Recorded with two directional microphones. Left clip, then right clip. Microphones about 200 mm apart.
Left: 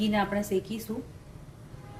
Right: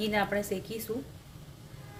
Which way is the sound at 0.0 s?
25° right (ahead or behind).